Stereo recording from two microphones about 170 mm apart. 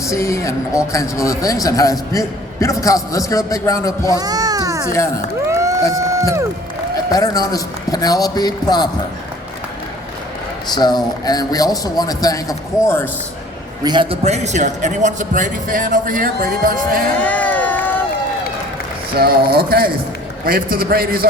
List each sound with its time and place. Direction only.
0.0 s a man's voice: 15° left (ahead or behind)
4.1 s children playing: 20° right (ahead or behind)
5.5 s a sound: 15° right (ahead or behind)
6.0 s run: 20° right (ahead or behind)
6.9 s a man's voice: 20° left (ahead or behind)
10.8 s a man's voice: 25° left (ahead or behind)
13.8 s a man's voice: 30° right (ahead or behind); by 17.0 s 55° right (ahead or behind)
17.2 s crowd: 10° left (ahead or behind)
19.1 s a man's voice: 65° right (ahead or behind)